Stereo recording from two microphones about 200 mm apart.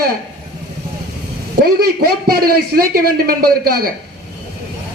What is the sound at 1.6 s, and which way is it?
A man's voice, 50° right (ahead or behind).